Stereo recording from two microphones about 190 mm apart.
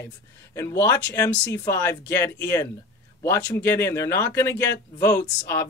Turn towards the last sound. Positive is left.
turn(degrees=15)  # may be behind; listen again after turning